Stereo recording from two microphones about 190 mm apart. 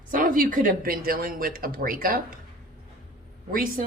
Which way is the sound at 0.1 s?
45° right (ahead or behind).